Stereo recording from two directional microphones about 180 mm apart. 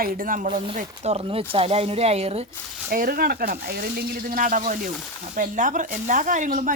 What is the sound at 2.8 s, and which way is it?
Speech, 55° right (ahead or behind).